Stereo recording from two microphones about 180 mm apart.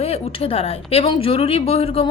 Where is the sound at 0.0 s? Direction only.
30° left (ahead or behind).